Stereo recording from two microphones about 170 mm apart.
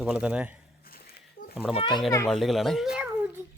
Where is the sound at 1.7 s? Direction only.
25° left (ahead or behind).